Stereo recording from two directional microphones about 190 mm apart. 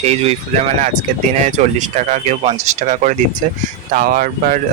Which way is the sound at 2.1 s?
40° right (ahead or behind).